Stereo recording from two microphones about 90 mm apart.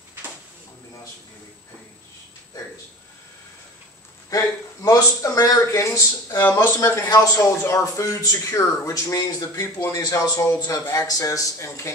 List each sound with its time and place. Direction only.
4.3 s a man's voice: 40° left (ahead or behind)
6.4 s a man's voice: 25° left (ahead or behind)